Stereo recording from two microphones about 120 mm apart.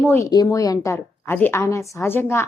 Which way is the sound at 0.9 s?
15° left (ahead or behind).